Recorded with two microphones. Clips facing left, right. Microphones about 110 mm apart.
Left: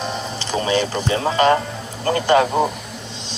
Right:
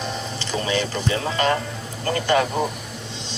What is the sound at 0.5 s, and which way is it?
Speech, 25° left (ahead or behind).